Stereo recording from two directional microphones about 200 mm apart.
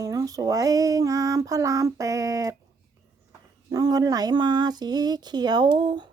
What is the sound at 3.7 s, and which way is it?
Speech, 20° right (ahead or behind).